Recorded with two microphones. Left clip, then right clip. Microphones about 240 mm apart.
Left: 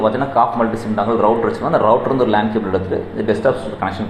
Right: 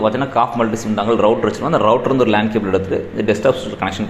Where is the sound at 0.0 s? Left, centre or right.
Right.